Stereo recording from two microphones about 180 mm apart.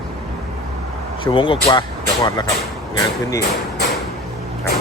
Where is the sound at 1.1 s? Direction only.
30° left (ahead or behind).